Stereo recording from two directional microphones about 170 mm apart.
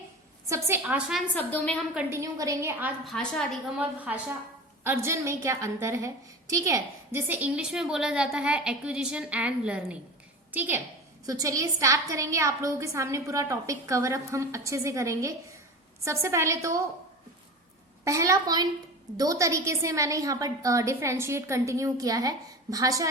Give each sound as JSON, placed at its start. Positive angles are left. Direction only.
{"t": 0.4, "sound": "a woman's voice", "side_deg": -15}
{"t": 1.4, "sound": "a woman's voice", "side_deg": 10}
{"t": 2.0, "sound": "a woman's voice", "side_deg": -15}
{"t": 3.0, "sound": "a woman's voice", "side_deg": 5}
{"t": 3.8, "sound": "a woman's voice", "side_deg": -10}
{"t": 18.0, "sound": "a woman's voice", "side_deg": -20}